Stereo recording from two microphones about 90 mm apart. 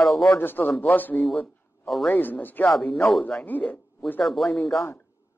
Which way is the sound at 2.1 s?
20° left (ahead or behind).